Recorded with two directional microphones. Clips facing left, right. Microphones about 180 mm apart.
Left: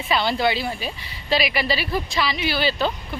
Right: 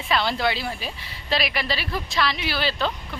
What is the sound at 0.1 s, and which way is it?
Speech, centre (ahead or behind).